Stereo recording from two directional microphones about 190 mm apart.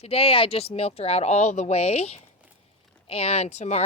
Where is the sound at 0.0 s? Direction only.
30° left (ahead or behind).